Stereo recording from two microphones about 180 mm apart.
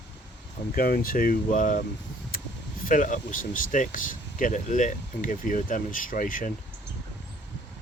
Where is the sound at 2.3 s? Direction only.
55° left (ahead or behind).